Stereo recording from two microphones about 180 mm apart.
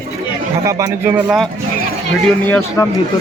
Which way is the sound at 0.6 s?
15° right (ahead or behind).